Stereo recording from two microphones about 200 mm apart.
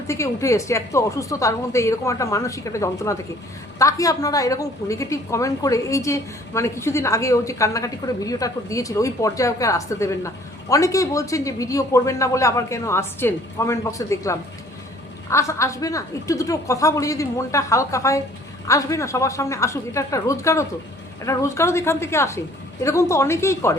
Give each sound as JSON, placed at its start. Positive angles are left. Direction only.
{"t": 0.1, "sound": "a woman's voice", "side_deg": 15}